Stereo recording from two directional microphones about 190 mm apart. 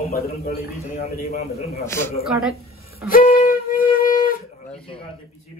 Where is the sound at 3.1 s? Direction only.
50° left (ahead or behind).